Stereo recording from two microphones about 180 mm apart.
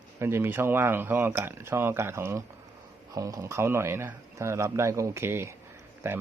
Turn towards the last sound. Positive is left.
turn(degrees=-15)  # may be behind; listen again after turning